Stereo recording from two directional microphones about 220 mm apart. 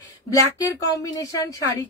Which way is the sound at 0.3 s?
15° left (ahead or behind).